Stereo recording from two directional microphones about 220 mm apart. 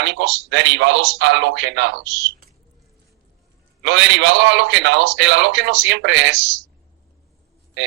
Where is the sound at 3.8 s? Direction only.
55° right (ahead or behind).